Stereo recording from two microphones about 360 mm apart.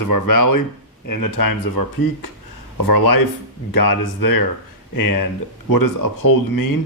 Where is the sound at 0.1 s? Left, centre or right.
Left.